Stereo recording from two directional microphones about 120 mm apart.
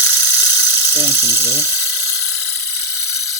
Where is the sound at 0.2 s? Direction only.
30° left (ahead or behind).